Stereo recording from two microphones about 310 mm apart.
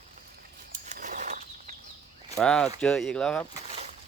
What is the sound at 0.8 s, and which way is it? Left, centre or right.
Bird flight, right.